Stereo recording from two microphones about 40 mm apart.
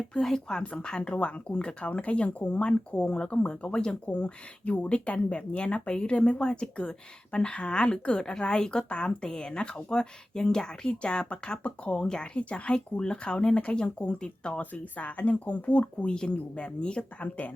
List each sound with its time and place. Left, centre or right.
0.1 s speech: centre
14.6 s speech: left
16.1 s speech: left
17.2 s speech: left